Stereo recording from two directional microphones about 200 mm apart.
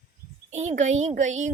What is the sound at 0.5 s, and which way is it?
Speech, 35° right (ahead or behind).